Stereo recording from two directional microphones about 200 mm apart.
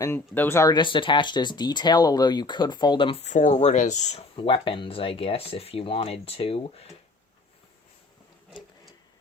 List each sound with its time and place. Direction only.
0.0 s speech: 10° left (ahead or behind); by 6.8 s 30° left (ahead or behind)